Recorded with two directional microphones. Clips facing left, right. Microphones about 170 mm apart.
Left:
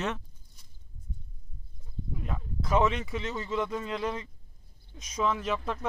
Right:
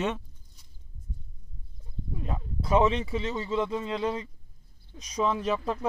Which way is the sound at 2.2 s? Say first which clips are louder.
Right 3 dB; 30° right (ahead or behind).